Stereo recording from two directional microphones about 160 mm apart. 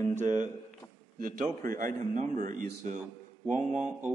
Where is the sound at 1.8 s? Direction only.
55° right (ahead or behind).